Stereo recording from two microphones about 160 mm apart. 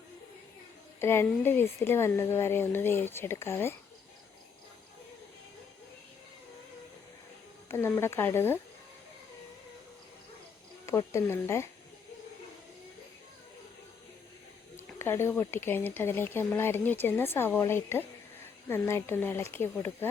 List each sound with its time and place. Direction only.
1.0 s speech: 15° left (ahead or behind)
7.7 s speech: 15° left (ahead or behind)
10.8 s speech: 20° left (ahead or behind)
14.9 s speech: 15° left (ahead or behind)